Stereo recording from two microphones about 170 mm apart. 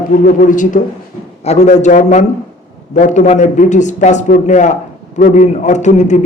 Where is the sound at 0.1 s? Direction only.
55° left (ahead or behind).